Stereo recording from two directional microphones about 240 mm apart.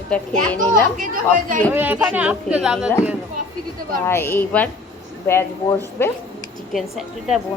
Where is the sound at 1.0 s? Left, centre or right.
Right.